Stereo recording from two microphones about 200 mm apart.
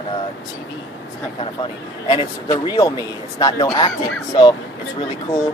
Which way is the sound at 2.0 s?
20° left (ahead or behind).